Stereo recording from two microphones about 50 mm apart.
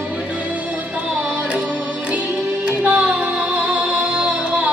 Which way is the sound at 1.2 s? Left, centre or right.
Right.